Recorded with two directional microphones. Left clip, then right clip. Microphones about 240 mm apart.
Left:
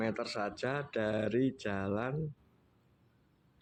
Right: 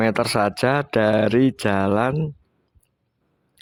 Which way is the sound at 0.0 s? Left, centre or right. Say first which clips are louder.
Right 16 dB; right.